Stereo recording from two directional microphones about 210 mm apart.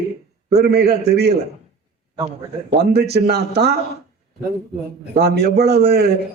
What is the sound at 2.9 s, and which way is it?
Speech, 50° right (ahead or behind).